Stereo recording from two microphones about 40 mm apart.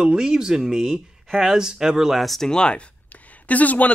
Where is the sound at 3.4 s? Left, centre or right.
Left.